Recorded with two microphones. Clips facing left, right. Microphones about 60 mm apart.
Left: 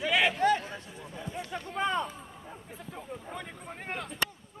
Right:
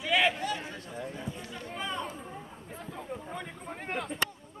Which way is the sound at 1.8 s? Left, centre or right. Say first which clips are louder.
Left 7 dB; left.